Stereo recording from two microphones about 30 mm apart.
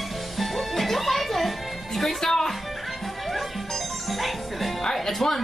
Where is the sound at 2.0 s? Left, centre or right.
Centre.